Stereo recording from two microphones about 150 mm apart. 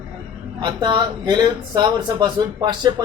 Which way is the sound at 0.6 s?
30° right (ahead or behind).